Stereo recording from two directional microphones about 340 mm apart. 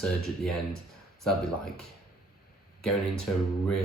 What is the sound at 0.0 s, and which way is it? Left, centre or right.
Speech, centre.